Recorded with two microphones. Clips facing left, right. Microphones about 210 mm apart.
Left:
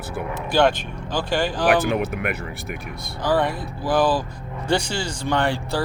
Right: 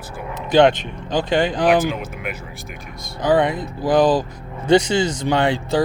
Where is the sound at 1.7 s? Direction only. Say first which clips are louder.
Right 1 dB; 65° left (ahead or behind).